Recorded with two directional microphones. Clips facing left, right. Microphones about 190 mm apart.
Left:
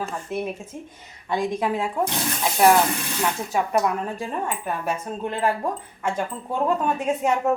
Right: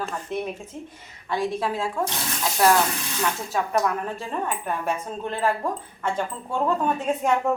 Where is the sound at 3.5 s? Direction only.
15° left (ahead or behind).